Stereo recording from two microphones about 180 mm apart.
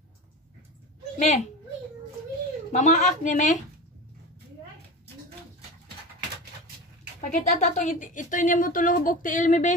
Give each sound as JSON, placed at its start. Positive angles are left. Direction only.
{"t": 1.1, "sound": "speech", "side_deg": 40}
{"t": 2.7, "sound": "speech", "side_deg": 40}
{"t": 7.2, "sound": "speech", "side_deg": 40}